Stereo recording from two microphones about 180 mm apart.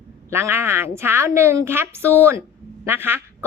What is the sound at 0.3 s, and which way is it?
A woman's voice, 15° right (ahead or behind).